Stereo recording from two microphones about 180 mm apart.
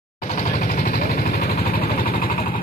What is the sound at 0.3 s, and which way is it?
Vehicle, 45° left (ahead or behind).